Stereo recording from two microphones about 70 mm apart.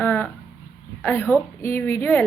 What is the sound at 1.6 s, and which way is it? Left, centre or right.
Speech, left.